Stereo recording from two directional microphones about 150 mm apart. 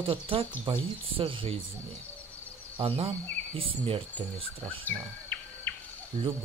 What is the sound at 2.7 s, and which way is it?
Speech, 40° right (ahead or behind).